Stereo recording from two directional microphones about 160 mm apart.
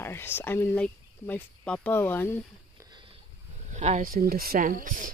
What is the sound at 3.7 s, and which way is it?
Speech, 45° right (ahead or behind).